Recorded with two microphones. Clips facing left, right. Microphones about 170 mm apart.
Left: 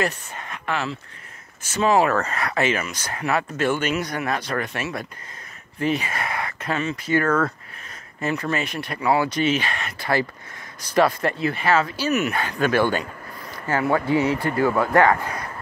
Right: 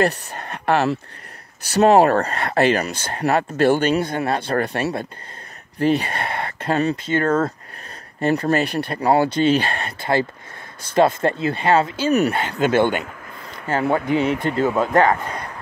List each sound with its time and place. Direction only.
0.0 s speech: 35° right (ahead or behind)
0.7 s speech: 65° right (ahead or behind)
1.6 s speech: 35° right (ahead or behind)